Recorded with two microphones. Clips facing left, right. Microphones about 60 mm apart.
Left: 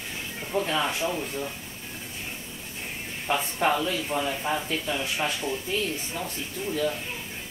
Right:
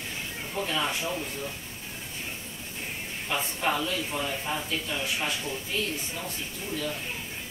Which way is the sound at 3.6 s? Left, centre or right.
Left.